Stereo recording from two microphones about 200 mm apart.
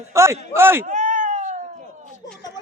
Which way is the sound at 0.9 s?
35° right (ahead or behind).